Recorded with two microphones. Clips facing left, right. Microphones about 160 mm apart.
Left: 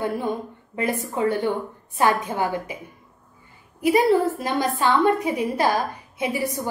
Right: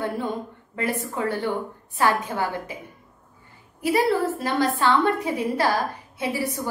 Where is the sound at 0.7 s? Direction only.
20° left (ahead or behind).